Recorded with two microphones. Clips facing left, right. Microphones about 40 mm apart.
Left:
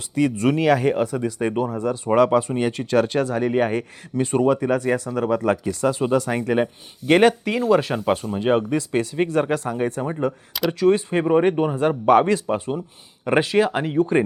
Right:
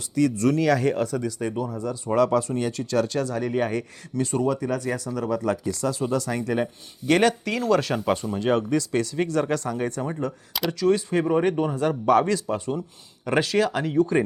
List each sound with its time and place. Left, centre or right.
0.1 s speech: left
1.4 s speech: left